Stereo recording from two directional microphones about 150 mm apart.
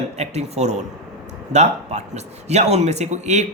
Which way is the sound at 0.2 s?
45° right (ahead or behind).